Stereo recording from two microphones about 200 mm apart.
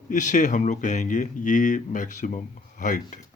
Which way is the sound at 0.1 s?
40° left (ahead or behind).